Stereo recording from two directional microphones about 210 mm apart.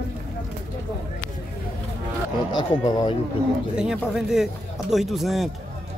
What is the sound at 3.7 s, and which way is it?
A man's voice, 5° right (ahead or behind).